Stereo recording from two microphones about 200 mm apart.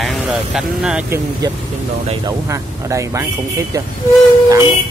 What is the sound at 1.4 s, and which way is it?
Speech, 20° right (ahead or behind).